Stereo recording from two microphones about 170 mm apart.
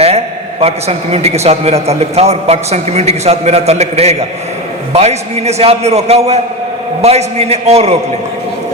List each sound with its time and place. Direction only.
0.6 s a man's voice: 40° right (ahead or behind)